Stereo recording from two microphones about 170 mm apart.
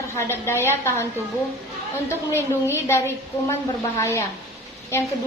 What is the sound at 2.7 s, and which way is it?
A woman's voice, 15° left (ahead or behind).